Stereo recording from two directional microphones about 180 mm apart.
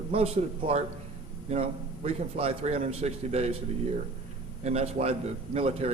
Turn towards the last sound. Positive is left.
turn(degrees=-35)  # may be behind; listen again after turning